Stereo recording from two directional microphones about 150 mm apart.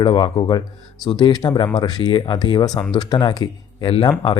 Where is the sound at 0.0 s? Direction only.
30° left (ahead or behind).